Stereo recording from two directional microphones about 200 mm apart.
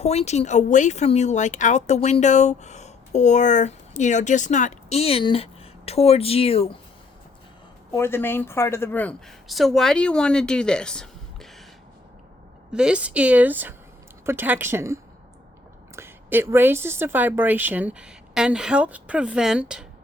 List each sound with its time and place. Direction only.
0.0 s speech: 30° left (ahead or behind)
7.9 s speech: 10° left (ahead or behind)
12.7 s speech: 5° right (ahead or behind)